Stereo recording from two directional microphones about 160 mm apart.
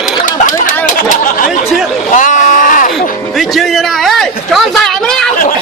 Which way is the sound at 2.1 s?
50° left (ahead or behind).